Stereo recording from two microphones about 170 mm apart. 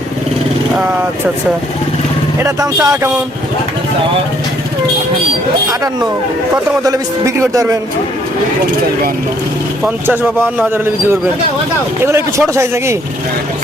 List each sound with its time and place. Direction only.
2.4 s speech: 20° right (ahead or behind)
6.8 s speech: 20° right (ahead or behind)
9.8 s a man's voice: 10° right (ahead or behind)
12.0 s a man's voice: 15° right (ahead or behind)